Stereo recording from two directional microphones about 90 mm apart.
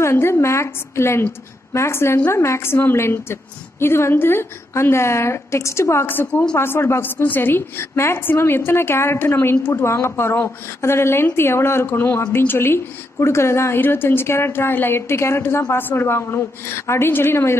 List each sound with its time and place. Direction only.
0.0 s a woman's voice: 30° left (ahead or behind)